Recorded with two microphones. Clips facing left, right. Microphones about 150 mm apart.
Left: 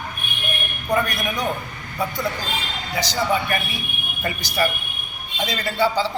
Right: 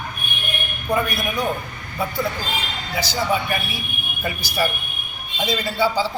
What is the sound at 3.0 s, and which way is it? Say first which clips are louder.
A man's voice: even; 5° right (ahead or behind).